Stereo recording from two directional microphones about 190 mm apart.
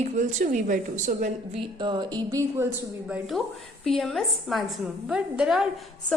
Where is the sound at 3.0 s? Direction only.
5° right (ahead or behind).